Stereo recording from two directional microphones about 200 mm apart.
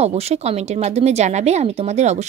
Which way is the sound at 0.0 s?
30° right (ahead or behind).